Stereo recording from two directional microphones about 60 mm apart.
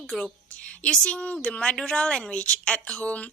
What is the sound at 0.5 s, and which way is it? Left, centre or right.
A woman's voice, centre.